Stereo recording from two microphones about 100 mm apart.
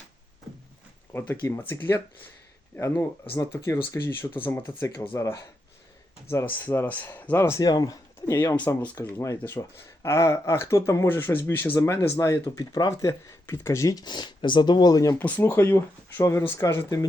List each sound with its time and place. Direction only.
1.1 s speech: 20° left (ahead or behind)
5.1 s speech: 35° left (ahead or behind)
6.4 s speech: 15° left (ahead or behind)
7.6 s speech: 40° left (ahead or behind)
15.2 s speech: 20° left (ahead or behind)